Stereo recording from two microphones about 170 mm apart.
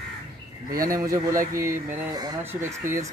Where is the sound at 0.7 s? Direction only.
55° right (ahead or behind).